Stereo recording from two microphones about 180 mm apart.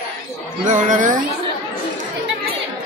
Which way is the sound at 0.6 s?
45° right (ahead or behind).